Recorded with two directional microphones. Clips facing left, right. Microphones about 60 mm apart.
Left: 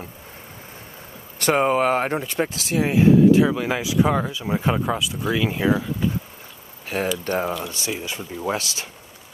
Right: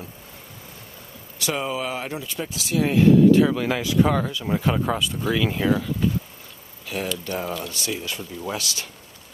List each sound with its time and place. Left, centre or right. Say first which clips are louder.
1.4 s speech: left 8 dB; left
2.8 s speech: even; centre
4.8 s speech: even; centre
6.9 s speech: left 4 dB; left
7.6 s speech: left 1 dB; left